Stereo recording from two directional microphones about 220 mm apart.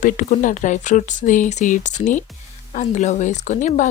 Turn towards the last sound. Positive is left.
turn(degrees=35)  # may be behind; listen again after turning